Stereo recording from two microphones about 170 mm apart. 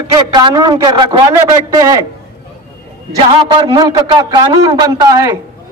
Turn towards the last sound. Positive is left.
turn(degrees=-20)  # may be behind; listen again after turning